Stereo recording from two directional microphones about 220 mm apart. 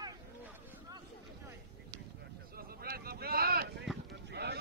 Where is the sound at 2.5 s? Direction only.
45° right (ahead or behind).